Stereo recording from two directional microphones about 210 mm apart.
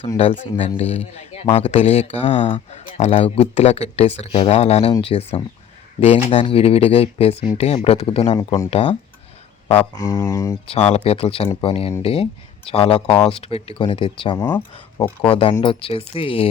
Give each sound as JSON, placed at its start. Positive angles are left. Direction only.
{"t": 0.2, "sound": "speech", "side_deg": 25}
{"t": 10.7, "sound": "speech", "side_deg": 30}
{"t": 14.4, "sound": "speech", "side_deg": 10}
{"t": 15.2, "sound": "speech", "side_deg": 25}